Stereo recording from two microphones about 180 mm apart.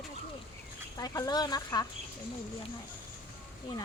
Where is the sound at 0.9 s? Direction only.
20° left (ahead or behind).